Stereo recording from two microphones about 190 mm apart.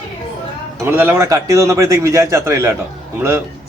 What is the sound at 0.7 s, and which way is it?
A man's voice, 10° right (ahead or behind).